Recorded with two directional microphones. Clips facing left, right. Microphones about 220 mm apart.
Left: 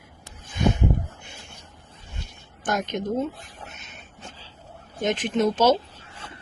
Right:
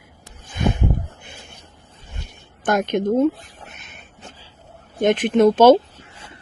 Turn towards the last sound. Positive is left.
turn(degrees=-55)  # may be behind; listen again after turning